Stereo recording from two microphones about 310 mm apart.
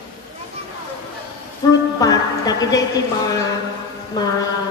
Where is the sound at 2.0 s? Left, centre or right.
Centre.